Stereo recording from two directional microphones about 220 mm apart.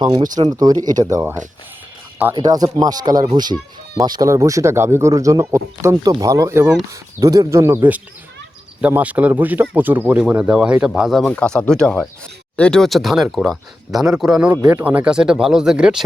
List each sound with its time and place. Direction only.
0.0 s speech: 20° right (ahead or behind); by 14.5 s centre (ahead or behind)
14.5 s speech: 15° right (ahead or behind)